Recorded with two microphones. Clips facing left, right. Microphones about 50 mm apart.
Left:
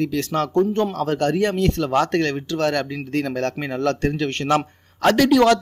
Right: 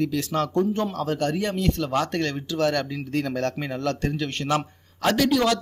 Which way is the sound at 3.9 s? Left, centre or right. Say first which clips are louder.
Left 6 dB; left.